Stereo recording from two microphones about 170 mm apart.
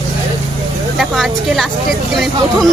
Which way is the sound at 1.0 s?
Centre (ahead or behind).